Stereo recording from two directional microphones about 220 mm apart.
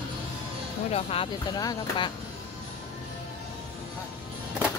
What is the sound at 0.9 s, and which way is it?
Speech, 25° left (ahead or behind).